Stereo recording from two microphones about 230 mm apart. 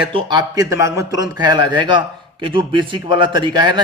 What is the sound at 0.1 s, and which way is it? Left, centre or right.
A man's voice, right.